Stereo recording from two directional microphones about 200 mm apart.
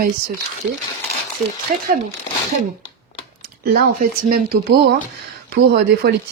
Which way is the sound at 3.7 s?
50° right (ahead or behind).